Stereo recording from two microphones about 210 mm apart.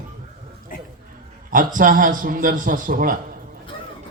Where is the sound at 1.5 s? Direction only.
40° right (ahead or behind).